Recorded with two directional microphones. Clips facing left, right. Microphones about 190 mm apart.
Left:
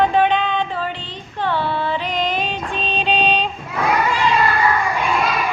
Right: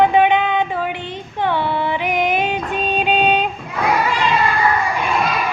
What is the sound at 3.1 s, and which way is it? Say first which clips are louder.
Child singing: right 2 dB; 50° right (ahead or behind).